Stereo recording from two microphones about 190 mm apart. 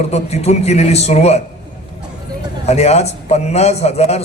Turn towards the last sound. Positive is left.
turn(degrees=35)  # may be behind; listen again after turning